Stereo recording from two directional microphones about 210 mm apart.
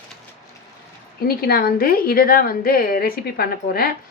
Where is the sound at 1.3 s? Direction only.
45° left (ahead or behind).